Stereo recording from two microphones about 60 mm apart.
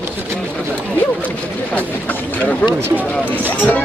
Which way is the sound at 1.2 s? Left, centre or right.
Left.